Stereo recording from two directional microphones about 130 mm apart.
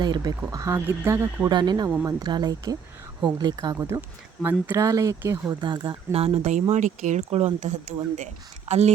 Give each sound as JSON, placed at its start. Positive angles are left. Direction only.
{"t": 0.0, "sound": "speech", "side_deg": -30}
{"t": 1.5, "sound": "speech", "side_deg": -35}
{"t": 5.5, "sound": "speech", "side_deg": -35}